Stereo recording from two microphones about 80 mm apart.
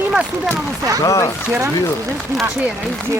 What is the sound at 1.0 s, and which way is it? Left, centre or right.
Speech, left.